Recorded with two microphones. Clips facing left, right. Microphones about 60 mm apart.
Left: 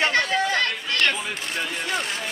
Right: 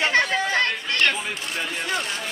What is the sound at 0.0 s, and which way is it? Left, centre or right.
Chatter, centre.